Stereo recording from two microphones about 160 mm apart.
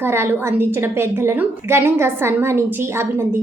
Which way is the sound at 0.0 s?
15° right (ahead or behind).